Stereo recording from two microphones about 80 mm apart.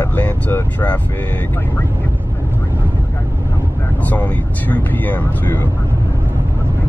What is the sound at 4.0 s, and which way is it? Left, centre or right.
Speech, left.